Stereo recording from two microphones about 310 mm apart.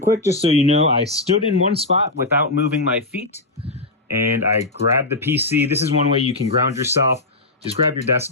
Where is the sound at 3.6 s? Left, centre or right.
Centre.